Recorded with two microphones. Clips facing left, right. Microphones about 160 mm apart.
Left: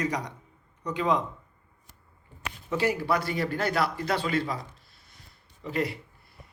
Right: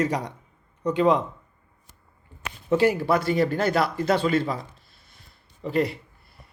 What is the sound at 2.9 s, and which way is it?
A man's voice, 25° right (ahead or behind).